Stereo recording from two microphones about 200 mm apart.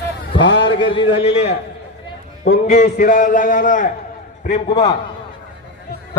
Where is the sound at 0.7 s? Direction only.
25° left (ahead or behind).